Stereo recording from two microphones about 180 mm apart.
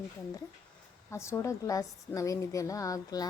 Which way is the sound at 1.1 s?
15° left (ahead or behind).